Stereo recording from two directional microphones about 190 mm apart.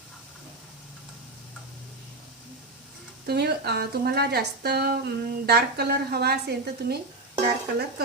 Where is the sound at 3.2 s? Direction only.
60° right (ahead or behind).